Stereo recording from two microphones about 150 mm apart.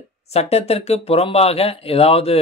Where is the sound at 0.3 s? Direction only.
45° left (ahead or behind).